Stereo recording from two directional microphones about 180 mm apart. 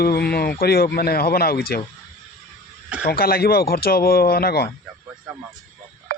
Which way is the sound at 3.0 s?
55° left (ahead or behind).